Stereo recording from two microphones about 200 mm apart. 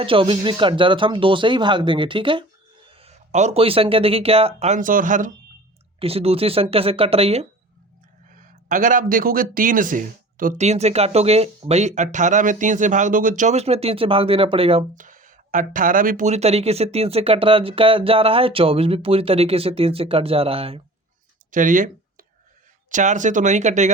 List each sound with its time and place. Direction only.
0.0 s speech: 25° right (ahead or behind)
6.0 s speech: 30° right (ahead or behind)
8.3 s speech: 40° right (ahead or behind)
14.9 s speech: 40° right (ahead or behind)
21.5 s a sound: 40° right (ahead or behind)
22.9 s speech: 40° right (ahead or behind)